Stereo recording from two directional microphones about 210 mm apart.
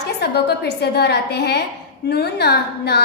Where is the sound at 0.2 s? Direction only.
50° left (ahead or behind).